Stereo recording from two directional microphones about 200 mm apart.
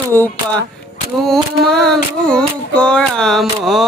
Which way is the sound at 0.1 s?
10° left (ahead or behind).